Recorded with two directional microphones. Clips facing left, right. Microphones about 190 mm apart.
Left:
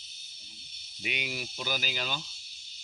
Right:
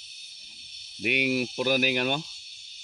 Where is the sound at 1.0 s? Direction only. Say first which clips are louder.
Right 11 dB; 60° right (ahead or behind).